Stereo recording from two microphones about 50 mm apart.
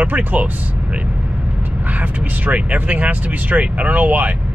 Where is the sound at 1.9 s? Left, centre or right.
Right.